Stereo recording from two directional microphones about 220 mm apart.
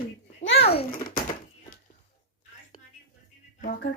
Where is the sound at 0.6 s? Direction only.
25° left (ahead or behind).